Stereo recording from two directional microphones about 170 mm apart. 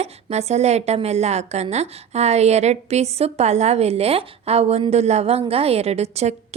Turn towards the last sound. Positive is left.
turn(degrees=-40)  # may be behind; listen again after turning